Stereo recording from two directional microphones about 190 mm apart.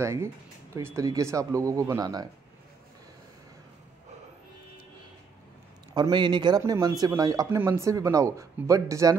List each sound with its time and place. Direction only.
0.0 s speech: 15° right (ahead or behind)
5.9 s speech: 25° right (ahead or behind)